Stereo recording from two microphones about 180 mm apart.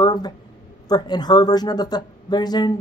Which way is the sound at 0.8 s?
20° left (ahead or behind).